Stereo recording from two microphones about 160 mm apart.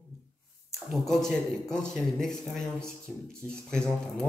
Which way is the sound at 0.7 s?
Centre (ahead or behind).